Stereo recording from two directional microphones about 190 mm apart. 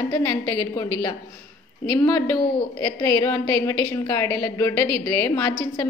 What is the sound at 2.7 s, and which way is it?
A woman's voice, 20° left (ahead or behind).